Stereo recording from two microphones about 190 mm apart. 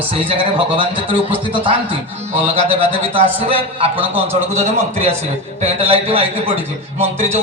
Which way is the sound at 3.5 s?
30° right (ahead or behind).